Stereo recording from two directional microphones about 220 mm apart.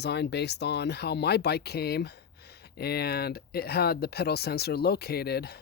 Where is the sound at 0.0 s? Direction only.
50° left (ahead or behind).